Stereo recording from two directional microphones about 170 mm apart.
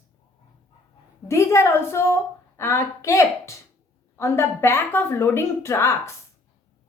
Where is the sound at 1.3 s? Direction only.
15° left (ahead or behind).